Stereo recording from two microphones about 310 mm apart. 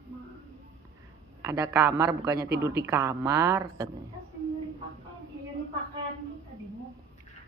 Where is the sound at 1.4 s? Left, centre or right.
Centre.